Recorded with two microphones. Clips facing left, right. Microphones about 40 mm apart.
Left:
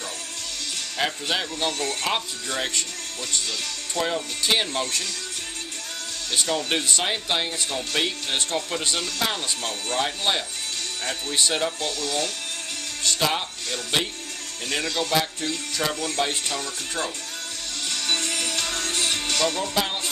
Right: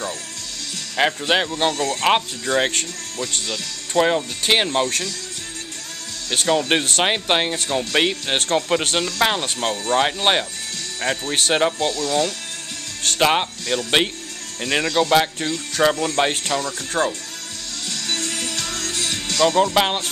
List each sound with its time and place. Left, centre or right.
0.9 s speech: right
1.8 s speech: right
2.0 s speech: right
4.0 s speech: right
4.8 s speech: right
6.3 s speech: right
12.0 s speech: right
13.0 s speech: right
17.8 s music: left
19.4 s speech: right